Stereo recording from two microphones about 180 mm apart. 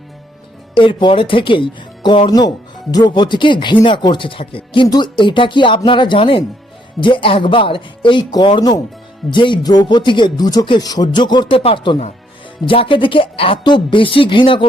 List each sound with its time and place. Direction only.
0.8 s speech: 25° left (ahead or behind)